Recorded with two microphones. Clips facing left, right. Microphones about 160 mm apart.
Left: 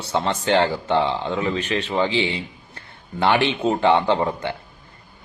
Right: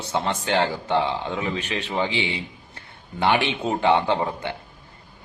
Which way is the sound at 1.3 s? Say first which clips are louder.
Left 4 dB; 15° right (ahead or behind).